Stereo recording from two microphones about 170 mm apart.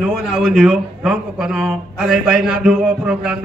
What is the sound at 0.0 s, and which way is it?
Speech, centre (ahead or behind).